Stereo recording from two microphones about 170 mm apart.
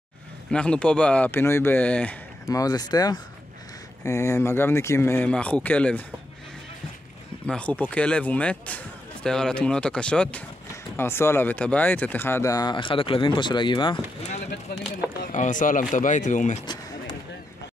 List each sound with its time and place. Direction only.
0.5 s a man's voice: 5° left (ahead or behind)
2.5 s a man's voice: 25° left (ahead or behind); by 6.0 s 10° left (ahead or behind)
7.4 s a man's voice: 5° left (ahead or behind); by 13.9 s 30° left (ahead or behind)
15.3 s speech: 50° left (ahead or behind)
16.6 s a sound: 25° left (ahead or behind)